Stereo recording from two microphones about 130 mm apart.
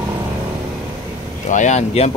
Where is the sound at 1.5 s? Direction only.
65° left (ahead or behind).